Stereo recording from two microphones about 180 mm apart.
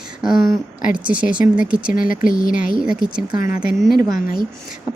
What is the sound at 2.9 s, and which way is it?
Speech, 5° right (ahead or behind).